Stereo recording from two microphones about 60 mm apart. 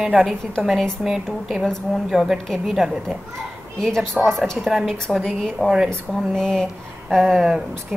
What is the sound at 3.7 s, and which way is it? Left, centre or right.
A woman's voice, centre.